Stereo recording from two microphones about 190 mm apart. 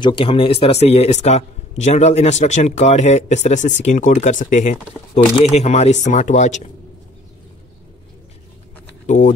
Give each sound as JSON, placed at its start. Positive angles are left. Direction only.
{"t": 0.0, "sound": "a man's voice", "side_deg": 25}
{"t": 9.0, "sound": "speech", "side_deg": 40}